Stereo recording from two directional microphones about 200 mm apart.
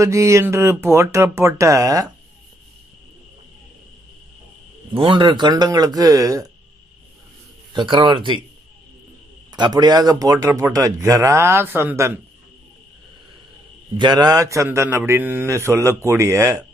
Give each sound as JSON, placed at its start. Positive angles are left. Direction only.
{"t": 0.0, "sound": "a man's voice", "side_deg": -15}
{"t": 4.9, "sound": "a man's voice", "side_deg": -25}
{"t": 7.7, "sound": "a man's voice", "side_deg": -25}
{"t": 9.5, "sound": "a man's voice", "side_deg": -20}
{"t": 13.9, "sound": "a man's voice", "side_deg": -20}